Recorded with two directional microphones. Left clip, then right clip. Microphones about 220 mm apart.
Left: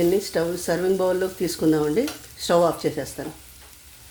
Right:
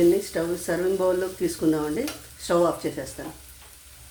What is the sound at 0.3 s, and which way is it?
Speech, 35° left (ahead or behind).